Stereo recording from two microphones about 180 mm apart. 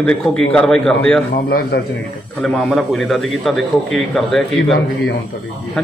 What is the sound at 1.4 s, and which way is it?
Speech, 60° left (ahead or behind).